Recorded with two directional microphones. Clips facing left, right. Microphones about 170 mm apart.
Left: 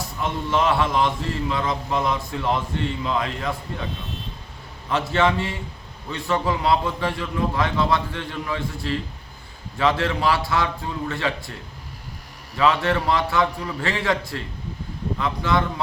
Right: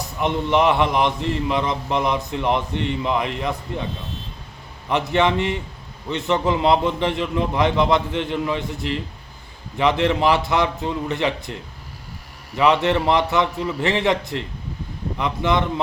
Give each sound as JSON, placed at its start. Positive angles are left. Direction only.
{"t": 0.2, "sound": "a man's voice", "side_deg": -20}
{"t": 4.9, "sound": "a man's voice", "side_deg": -20}
{"t": 12.5, "sound": "a man's voice", "side_deg": -20}